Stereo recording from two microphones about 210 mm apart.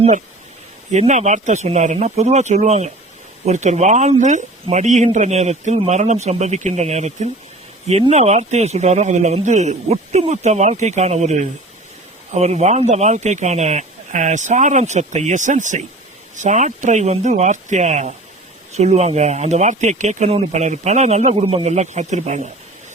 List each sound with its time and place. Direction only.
0.9 s speech: 35° right (ahead or behind)